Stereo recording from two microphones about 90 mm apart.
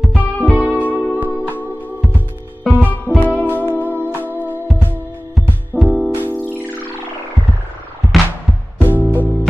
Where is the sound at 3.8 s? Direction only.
20° right (ahead or behind).